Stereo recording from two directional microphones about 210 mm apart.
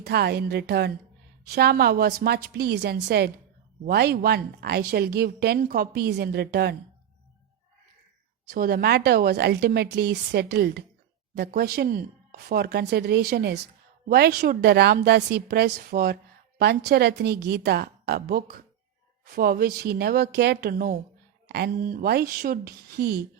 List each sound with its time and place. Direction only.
0.0 s speech: 50° right (ahead or behind)
8.4 s speech: 45° right (ahead or behind)